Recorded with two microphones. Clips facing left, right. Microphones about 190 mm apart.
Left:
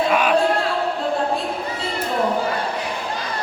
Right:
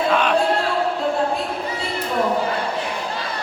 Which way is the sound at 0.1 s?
10° left (ahead or behind).